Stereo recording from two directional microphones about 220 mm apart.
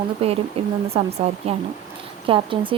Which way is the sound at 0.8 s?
25° right (ahead or behind).